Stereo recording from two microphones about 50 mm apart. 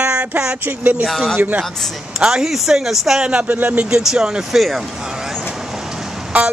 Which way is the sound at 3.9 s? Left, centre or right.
Centre.